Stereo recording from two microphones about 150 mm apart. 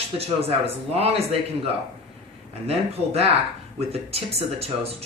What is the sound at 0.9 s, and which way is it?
A man's voice, 45° right (ahead or behind).